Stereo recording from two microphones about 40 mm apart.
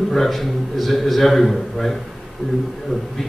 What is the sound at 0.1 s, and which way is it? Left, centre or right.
A man's voice, centre.